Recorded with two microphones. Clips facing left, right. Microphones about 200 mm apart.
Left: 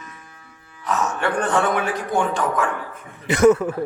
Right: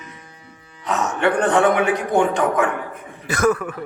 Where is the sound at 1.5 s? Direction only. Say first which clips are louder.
Right 5 dB; 65° right (ahead or behind).